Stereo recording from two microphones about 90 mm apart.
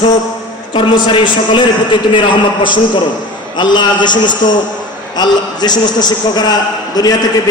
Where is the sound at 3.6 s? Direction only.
55° left (ahead or behind).